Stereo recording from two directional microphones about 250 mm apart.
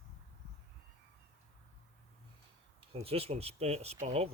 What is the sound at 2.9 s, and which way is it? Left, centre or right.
Speech, right.